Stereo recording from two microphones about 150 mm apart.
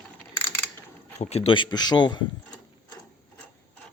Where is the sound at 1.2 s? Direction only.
45° left (ahead or behind).